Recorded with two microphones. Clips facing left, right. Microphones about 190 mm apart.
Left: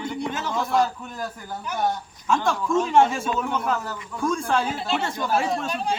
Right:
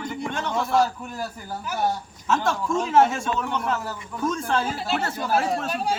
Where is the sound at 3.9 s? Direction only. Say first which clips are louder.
Left 1 dB; 20° right (ahead or behind).